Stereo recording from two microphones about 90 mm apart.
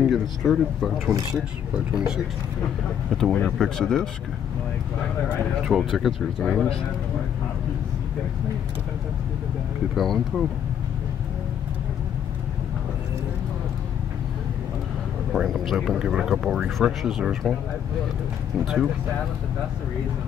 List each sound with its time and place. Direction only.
0.1 s speech: centre (ahead or behind)
3.1 s speech: centre (ahead or behind)
5.6 s speech: centre (ahead or behind)
9.9 s speech: centre (ahead or behind)
15.3 s speech: centre (ahead or behind)